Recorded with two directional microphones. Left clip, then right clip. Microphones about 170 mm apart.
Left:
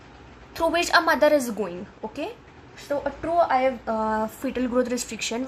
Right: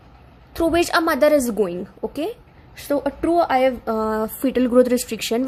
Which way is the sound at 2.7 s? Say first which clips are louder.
Right 5 dB; 75° right (ahead or behind).